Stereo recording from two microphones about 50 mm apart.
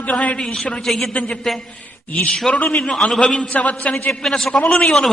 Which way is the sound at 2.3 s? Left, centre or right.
Centre.